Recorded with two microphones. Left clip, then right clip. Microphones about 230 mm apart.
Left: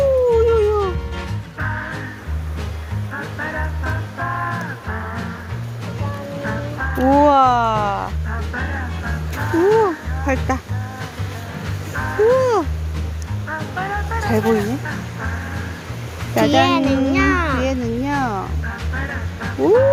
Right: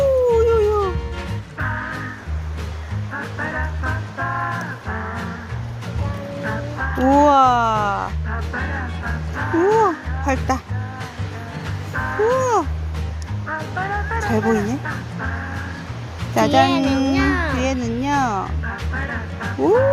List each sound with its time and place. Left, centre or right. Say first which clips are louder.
0.0 s howl: left 1 dB; centre
1.5 s music: even; centre
3.1 s music: even; centre
6.4 s music: even; centre
11.9 s music: left 3 dB; centre
16.3 s a sound: left 1 dB; centre
16.6 s a child's voice: even; left
16.8 s music: left 1 dB; centre
17.1 s music: left 2 dB; left
17.6 s music: left 1 dB; centre